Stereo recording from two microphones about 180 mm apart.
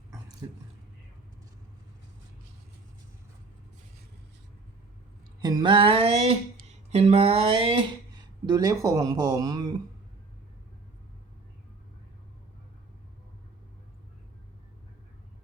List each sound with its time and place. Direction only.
0.4 s speech: 20° right (ahead or behind)
5.4 s speech: 20° right (ahead or behind)
6.9 s a sound: 35° right (ahead or behind)
8.4 s speech: 20° right (ahead or behind)